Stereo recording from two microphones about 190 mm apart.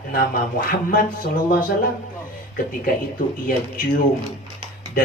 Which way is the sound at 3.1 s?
50° left (ahead or behind).